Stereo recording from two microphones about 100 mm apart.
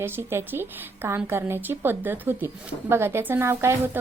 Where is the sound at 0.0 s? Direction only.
25° right (ahead or behind).